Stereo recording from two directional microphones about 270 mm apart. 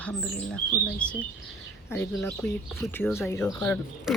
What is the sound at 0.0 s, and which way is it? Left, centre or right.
Speech, centre.